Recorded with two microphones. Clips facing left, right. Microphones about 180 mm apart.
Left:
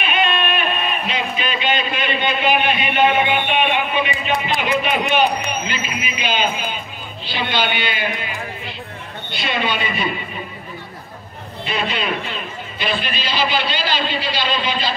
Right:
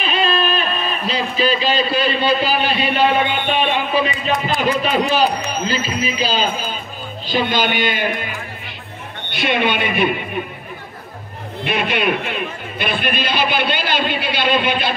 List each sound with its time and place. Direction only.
0.0 s a man's voice: 35° right (ahead or behind)
9.3 s a man's voice: 60° right (ahead or behind)
11.6 s a man's voice: 60° right (ahead or behind)